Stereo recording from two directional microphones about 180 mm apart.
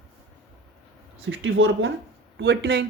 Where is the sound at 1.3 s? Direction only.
90° right.